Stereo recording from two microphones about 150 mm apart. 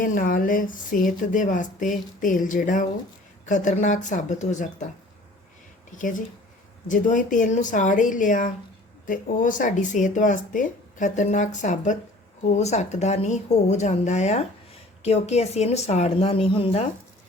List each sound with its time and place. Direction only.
0.0 s speech: 65° left (ahead or behind)
6.0 s speech: 60° left (ahead or behind); by 16.9 s 40° left (ahead or behind)